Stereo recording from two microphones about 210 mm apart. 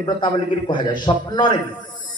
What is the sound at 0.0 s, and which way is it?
A man's voice, 20° left (ahead or behind).